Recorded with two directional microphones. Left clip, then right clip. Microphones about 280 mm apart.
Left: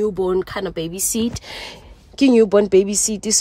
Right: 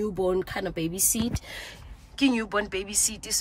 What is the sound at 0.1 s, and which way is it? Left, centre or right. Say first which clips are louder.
Speech: left 6 dB; centre.